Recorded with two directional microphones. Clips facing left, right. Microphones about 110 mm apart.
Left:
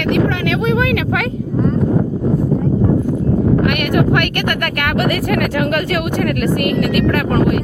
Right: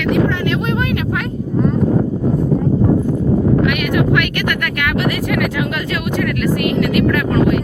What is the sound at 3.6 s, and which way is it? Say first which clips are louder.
Speech: left 1 dB; 50° left (ahead or behind).